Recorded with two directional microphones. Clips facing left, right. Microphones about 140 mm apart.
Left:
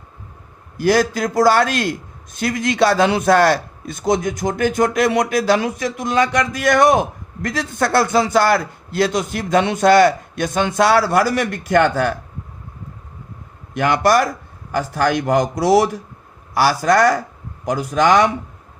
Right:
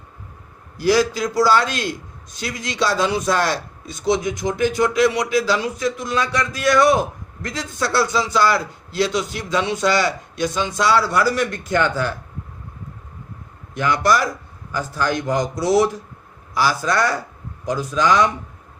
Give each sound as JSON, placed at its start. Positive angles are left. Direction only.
{"t": 0.8, "sound": "a man's voice", "side_deg": 50}
{"t": 13.7, "sound": "a man's voice", "side_deg": 60}